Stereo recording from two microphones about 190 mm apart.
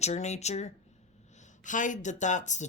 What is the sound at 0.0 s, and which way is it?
Speech, 35° left (ahead or behind).